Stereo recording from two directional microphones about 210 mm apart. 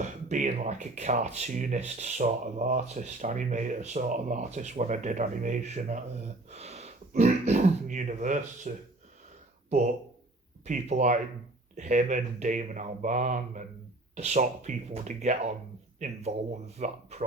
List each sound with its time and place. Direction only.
0.0 s speech: 35° right (ahead or behind)